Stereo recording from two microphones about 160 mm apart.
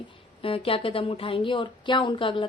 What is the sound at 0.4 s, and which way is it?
A woman's voice, 35° left (ahead or behind).